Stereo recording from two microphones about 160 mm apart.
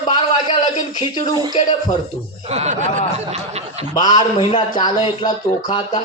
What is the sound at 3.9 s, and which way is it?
A man's voice, 25° left (ahead or behind).